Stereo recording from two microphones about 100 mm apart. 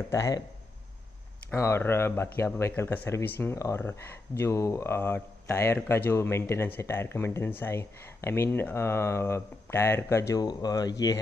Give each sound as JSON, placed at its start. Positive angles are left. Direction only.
{"t": 0.1, "sound": "speech", "side_deg": 30}
{"t": 1.5, "sound": "speech", "side_deg": 30}
{"t": 10.4, "sound": "speech", "side_deg": 40}